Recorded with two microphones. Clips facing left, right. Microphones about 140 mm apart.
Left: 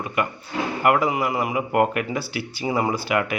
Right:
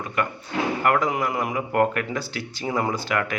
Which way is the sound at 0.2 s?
10° left (ahead or behind).